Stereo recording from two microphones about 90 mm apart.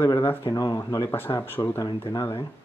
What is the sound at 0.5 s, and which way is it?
Speech, 45° left (ahead or behind).